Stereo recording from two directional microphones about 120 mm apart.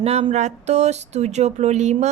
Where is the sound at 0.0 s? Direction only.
60° right (ahead or behind).